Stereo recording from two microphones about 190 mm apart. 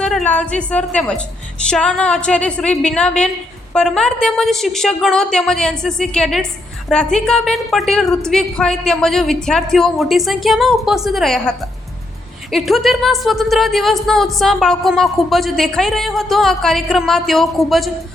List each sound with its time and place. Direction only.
0.0 s a woman's voice: 5° left (ahead or behind)